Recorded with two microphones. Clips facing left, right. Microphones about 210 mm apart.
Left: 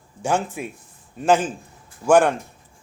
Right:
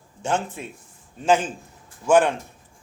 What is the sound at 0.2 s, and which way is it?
A man's voice, 10° left (ahead or behind).